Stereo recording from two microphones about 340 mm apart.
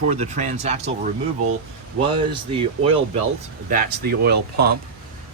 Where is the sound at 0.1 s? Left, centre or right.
Right.